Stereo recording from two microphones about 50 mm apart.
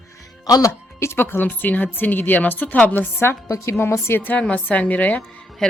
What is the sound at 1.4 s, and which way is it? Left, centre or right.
A woman's voice, left.